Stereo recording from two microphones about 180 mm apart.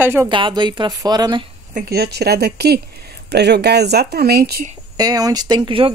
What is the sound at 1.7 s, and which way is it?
Speech, 55° right (ahead or behind).